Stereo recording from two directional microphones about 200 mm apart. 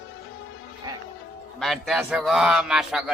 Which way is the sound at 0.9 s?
20° right (ahead or behind).